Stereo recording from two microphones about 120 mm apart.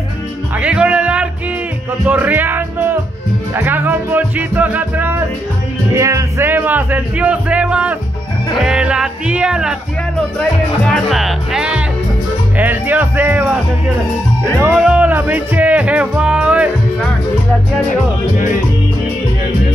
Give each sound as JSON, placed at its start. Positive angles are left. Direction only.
{"t": 0.6, "sound": "music", "side_deg": -10}
{"t": 3.5, "sound": "speech", "side_deg": -15}
{"t": 5.9, "sound": "speech", "side_deg": -25}
{"t": 10.8, "sound": "speech", "side_deg": 5}
{"t": 14.8, "sound": "speech", "side_deg": -10}